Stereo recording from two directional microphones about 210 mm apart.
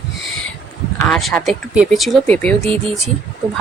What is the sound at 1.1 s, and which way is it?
Speech, centre (ahead or behind).